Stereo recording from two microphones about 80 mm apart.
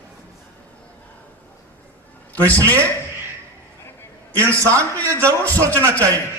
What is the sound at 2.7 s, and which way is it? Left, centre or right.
Speech, right.